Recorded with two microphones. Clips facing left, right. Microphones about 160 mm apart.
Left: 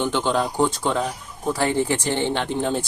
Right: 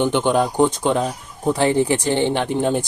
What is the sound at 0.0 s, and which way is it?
Speech, 15° right (ahead or behind).